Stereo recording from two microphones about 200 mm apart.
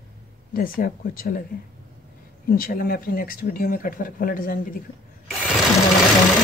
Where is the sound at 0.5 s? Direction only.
45° left (ahead or behind).